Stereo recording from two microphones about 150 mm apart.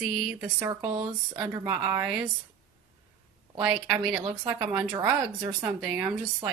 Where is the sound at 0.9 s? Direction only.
30° right (ahead or behind).